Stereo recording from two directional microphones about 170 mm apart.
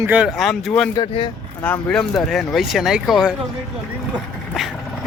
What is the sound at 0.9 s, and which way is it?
Speech, 30° left (ahead or behind).